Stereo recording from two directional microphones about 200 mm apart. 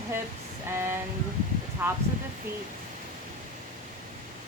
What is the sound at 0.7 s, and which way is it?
Speech, 10° right (ahead or behind).